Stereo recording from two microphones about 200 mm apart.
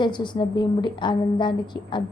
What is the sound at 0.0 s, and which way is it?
A woman's voice, 25° left (ahead or behind).